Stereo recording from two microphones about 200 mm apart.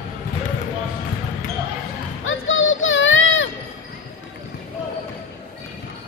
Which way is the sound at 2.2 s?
75° left (ahead or behind).